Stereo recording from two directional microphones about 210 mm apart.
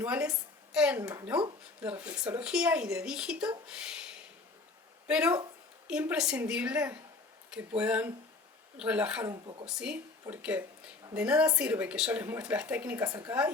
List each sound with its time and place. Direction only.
0.0 s speech: 5° right (ahead or behind)
5.0 s a woman's voice: 5° right (ahead or behind)
9.3 s speech: 25° right (ahead or behind)
9.6 s speech: 5° right (ahead or behind)